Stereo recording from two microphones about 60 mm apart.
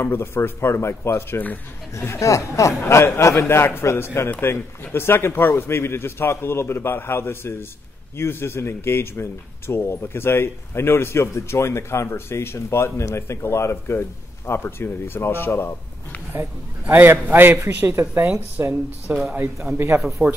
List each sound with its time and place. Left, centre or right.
0.0 s speech: left
16.8 s a man's voice: right
20.2 s speech: centre